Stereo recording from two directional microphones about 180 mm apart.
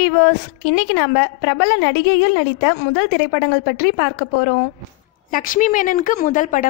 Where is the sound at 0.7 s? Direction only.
90° left.